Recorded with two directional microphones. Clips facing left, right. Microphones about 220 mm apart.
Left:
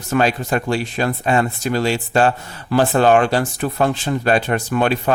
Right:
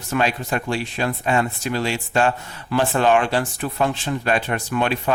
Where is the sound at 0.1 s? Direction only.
40° left (ahead or behind).